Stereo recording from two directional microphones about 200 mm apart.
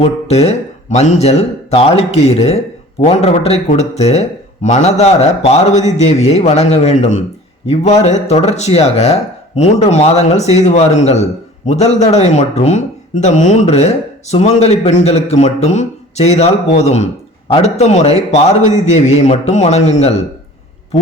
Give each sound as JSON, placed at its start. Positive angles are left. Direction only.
{"t": 0.0, "sound": "speech", "side_deg": 30}